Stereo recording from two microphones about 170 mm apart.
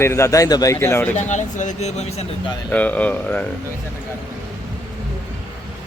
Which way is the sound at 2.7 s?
10° left (ahead or behind).